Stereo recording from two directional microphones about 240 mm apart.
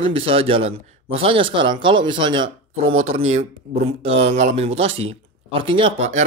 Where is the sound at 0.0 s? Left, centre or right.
Right.